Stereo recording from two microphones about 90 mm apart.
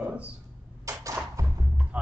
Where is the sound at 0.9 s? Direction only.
35° right (ahead or behind).